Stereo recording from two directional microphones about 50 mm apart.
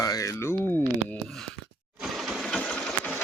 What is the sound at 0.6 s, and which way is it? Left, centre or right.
Speech, left.